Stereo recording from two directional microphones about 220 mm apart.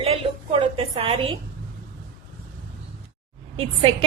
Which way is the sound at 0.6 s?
25° right (ahead or behind).